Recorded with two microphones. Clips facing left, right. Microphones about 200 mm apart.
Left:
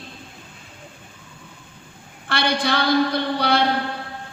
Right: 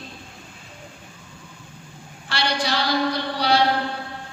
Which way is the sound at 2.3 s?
55° left (ahead or behind).